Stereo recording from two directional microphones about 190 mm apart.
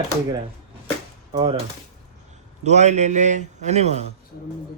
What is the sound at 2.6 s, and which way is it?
A man's voice, 35° right (ahead or behind).